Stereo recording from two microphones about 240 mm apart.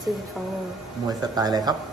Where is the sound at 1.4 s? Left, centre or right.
Centre.